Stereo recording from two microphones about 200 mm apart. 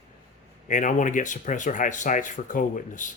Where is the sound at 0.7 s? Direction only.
40° left (ahead or behind).